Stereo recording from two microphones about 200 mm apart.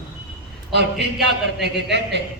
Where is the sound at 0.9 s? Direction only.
Centre (ahead or behind).